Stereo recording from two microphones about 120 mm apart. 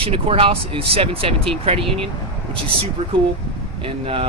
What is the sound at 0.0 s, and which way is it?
Speech, 50° right (ahead or behind).